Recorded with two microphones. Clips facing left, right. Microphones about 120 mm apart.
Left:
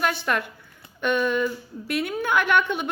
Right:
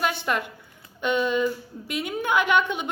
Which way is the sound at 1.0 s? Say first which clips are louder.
Even; 15° right (ahead or behind).